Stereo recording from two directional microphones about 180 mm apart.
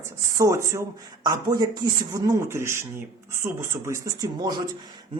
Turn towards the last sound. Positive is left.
turn(degrees=-25)  # may be behind; listen again after turning